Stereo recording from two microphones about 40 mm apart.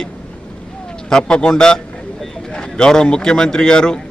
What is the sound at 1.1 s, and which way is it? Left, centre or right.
A man's voice, centre.